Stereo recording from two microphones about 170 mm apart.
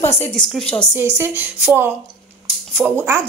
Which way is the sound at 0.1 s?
10° left (ahead or behind).